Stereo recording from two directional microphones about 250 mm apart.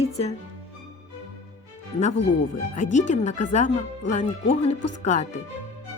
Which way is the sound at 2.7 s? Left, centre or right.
Left.